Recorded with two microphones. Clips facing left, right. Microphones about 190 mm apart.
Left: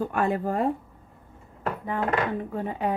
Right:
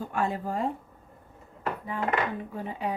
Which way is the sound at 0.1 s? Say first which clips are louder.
Left 4 dB; 60° left (ahead or behind).